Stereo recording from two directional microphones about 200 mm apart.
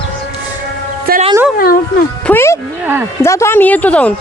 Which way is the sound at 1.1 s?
50° right (ahead or behind).